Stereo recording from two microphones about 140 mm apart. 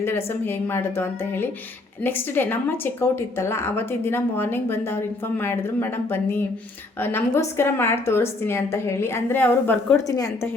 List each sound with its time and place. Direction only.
0.0 s a woman's voice: 15° left (ahead or behind)
10.1 s a woman's voice: 25° left (ahead or behind)